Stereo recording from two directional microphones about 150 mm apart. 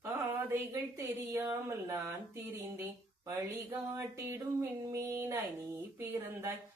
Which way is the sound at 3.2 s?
20° right (ahead or behind).